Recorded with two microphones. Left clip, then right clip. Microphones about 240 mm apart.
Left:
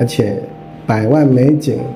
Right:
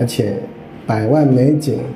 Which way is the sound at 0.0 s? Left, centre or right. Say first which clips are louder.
Left 3 dB; centre.